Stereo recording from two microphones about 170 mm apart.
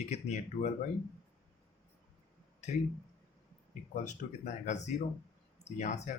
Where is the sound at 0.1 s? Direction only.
45° left (ahead or behind).